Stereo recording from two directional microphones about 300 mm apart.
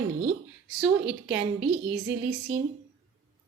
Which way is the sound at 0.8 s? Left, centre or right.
Centre.